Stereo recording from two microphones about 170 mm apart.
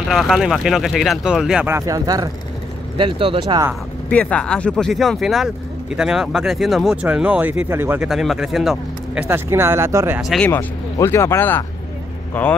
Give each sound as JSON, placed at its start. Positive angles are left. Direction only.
{"t": 0.1, "sound": "speech", "side_deg": 0}
{"t": 1.7, "sound": "speech", "side_deg": -20}
{"t": 3.0, "sound": "speech", "side_deg": -30}
{"t": 4.1, "sound": "speech", "side_deg": 10}
{"t": 8.1, "sound": "speech", "side_deg": 0}
{"t": 9.3, "sound": "speech", "side_deg": -15}
{"t": 10.2, "sound": "speech", "side_deg": 0}
{"t": 10.5, "sound": "speech", "side_deg": 15}